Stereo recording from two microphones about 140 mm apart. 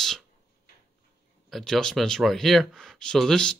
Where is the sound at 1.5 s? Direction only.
Centre (ahead or behind).